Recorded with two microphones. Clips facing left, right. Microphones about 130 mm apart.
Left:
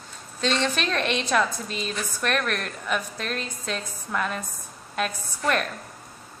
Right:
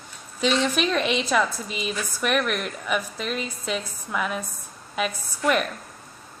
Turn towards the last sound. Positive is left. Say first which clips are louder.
# right 2 dB
turn(degrees=-5)  # may be behind; listen again after turning